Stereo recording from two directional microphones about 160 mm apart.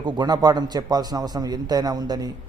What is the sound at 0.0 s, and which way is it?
A man's voice, 25° right (ahead or behind).